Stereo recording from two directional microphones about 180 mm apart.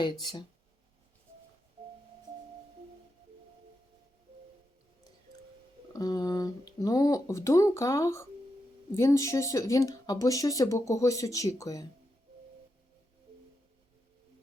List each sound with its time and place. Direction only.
0.0 s speech: 25° left (ahead or behind)
5.9 s speech: 20° left (ahead or behind)